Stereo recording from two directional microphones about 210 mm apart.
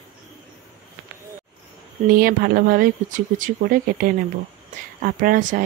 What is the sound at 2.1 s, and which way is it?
Speech, 45° right (ahead or behind).